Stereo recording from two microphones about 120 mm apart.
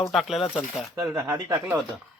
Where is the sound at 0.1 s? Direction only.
Centre (ahead or behind).